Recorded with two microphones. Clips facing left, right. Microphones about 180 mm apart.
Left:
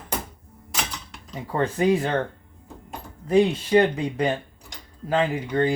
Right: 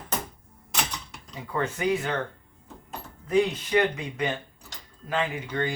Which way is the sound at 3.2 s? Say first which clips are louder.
Left 4 dB; 30° left (ahead or behind).